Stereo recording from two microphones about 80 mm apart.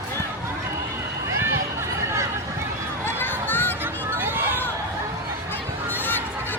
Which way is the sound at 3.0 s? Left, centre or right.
Left.